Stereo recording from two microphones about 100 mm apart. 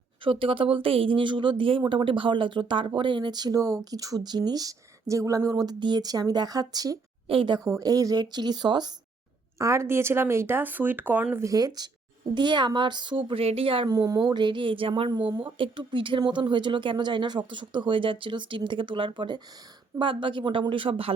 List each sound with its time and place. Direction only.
0.3 s speech: 65° right (ahead or behind); by 7.0 s 40° right (ahead or behind)
7.3 s speech: 60° right (ahead or behind)
7.6 s speech: 35° right (ahead or behind)
9.6 s speech: 30° right (ahead or behind)
11.4 s speech: 40° right (ahead or behind); by 13.8 s 70° right (ahead or behind)
13.8 s speech: 40° right (ahead or behind)
14.3 s speech: 50° right (ahead or behind)